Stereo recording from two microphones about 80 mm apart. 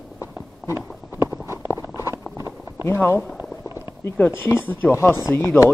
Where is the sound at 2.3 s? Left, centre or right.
Right.